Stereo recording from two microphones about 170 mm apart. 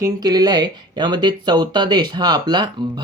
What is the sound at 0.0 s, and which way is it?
Speech, 25° right (ahead or behind).